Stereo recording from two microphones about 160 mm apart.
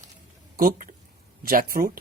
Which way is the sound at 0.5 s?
60° right (ahead or behind).